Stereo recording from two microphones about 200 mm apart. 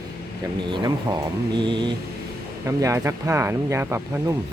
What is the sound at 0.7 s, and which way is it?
Speech, 20° right (ahead or behind).